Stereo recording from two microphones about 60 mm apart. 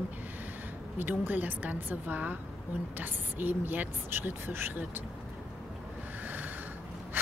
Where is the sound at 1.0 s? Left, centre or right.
Right.